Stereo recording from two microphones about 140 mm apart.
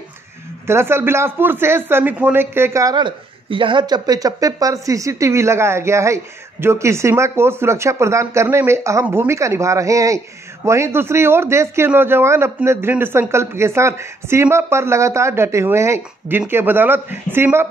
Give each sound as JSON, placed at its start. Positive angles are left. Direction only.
{"t": 0.7, "sound": "speech", "side_deg": -20}